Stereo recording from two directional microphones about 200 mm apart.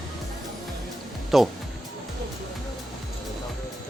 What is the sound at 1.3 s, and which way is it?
Speech, centre (ahead or behind).